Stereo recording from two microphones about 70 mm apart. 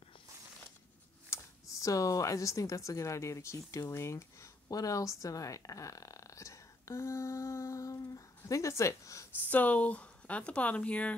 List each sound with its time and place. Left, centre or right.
1.3 s speech: left
4.6 s speech: left
9.5 s speech: left